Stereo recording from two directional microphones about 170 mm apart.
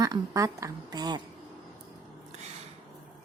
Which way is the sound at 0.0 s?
20° right (ahead or behind).